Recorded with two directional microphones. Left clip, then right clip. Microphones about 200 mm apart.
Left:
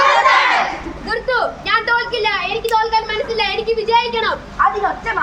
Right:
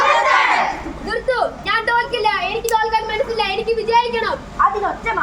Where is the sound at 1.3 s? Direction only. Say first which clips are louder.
Left 2 dB; centre (ahead or behind).